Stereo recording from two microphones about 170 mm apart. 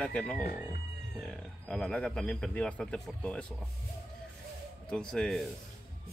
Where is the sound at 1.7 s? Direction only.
5° left (ahead or behind).